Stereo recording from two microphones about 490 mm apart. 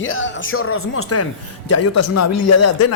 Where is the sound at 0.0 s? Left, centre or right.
Left.